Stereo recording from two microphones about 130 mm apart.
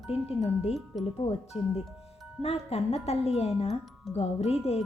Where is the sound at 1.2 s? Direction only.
50° left (ahead or behind).